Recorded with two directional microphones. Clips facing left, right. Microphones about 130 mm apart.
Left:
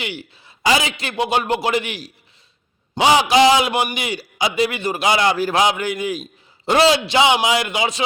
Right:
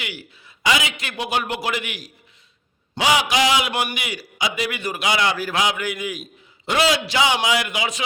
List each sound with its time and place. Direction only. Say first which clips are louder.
0.0 s a man's voice: left 5 dB; 25° left (ahead or behind)